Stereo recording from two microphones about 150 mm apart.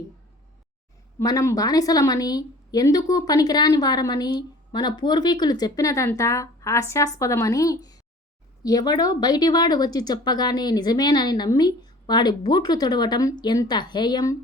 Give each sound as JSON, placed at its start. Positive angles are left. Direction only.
{"t": 1.2, "sound": "speech", "side_deg": 20}